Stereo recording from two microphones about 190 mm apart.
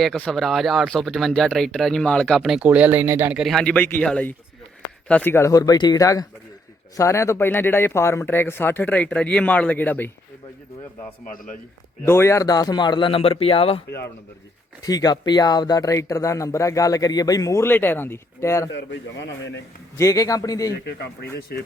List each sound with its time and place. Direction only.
0.0 s speech: 5° left (ahead or behind)
12.0 s a man's voice: 15° left (ahead or behind); by 13.8 s 30° left (ahead or behind)
14.8 s speech: 20° left (ahead or behind)
18.7 s a man's voice: 70° left (ahead or behind)
20.0 s speech: 15° left (ahead or behind)
20.7 s speech: 60° left (ahead or behind)